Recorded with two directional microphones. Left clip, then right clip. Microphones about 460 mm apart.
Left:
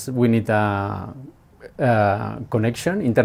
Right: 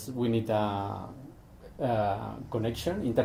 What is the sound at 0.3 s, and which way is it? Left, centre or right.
Speech, left.